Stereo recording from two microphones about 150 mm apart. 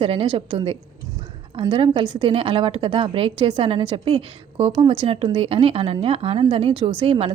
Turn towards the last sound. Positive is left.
turn(degrees=-40)  # may be behind; listen again after turning